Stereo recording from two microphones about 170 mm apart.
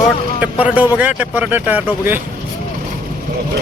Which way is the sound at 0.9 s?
10° right (ahead or behind).